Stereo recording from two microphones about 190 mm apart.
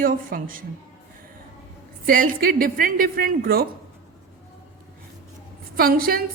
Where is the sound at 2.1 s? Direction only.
45° right (ahead or behind).